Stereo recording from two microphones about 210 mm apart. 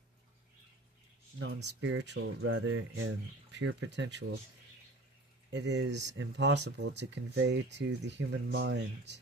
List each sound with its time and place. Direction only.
1.4 s speech: 60° right (ahead or behind)
2.5 s speech: 80° right; by 4.4 s 55° right (ahead or behind)
5.5 s speech: 55° right (ahead or behind)